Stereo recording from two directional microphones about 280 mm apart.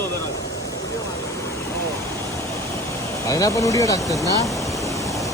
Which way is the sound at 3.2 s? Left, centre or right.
Centre.